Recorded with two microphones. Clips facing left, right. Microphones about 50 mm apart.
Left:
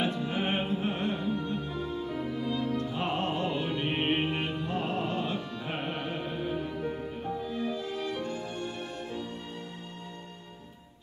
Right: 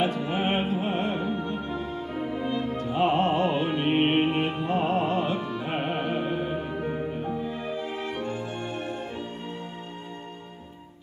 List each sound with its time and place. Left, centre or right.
0.0 s music: right